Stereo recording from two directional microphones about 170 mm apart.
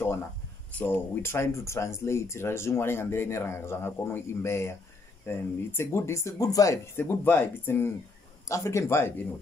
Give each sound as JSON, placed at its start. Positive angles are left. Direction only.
{"t": 0.7, "sound": "speech", "side_deg": 10}